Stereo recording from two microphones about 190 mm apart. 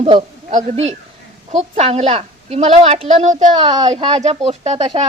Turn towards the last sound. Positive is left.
turn(degrees=-35)  # may be behind; listen again after turning